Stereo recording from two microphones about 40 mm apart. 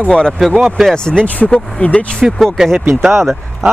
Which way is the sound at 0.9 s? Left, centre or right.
Centre.